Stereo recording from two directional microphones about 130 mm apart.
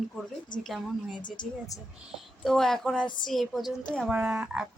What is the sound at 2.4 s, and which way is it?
Speech, 5° left (ahead or behind).